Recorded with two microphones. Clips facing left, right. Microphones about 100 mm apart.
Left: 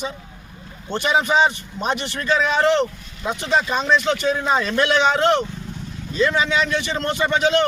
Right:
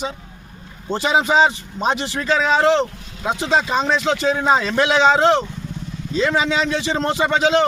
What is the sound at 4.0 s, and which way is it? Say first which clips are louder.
Speech: right 2 dB; 90° right.